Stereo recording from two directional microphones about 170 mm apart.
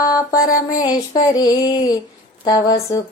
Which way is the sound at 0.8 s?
25° left (ahead or behind).